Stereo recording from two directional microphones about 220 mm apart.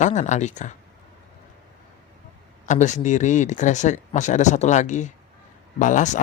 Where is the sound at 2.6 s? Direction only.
35° left (ahead or behind).